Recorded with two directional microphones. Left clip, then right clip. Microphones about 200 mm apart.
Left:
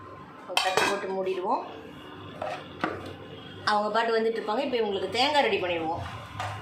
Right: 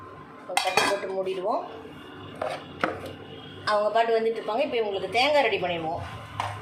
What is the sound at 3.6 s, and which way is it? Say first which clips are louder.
A woman's voice: right 2 dB; 25° left (ahead or behind).